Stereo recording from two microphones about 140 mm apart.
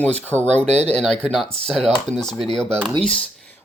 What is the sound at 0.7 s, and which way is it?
Speech, 50° right (ahead or behind).